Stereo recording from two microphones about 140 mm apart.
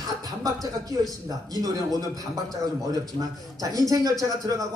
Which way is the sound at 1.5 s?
25° right (ahead or behind).